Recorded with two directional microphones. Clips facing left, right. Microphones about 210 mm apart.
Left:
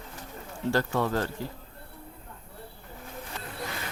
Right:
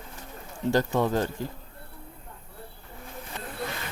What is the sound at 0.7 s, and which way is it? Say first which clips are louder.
Speech: right 3 dB; 15° right (ahead or behind).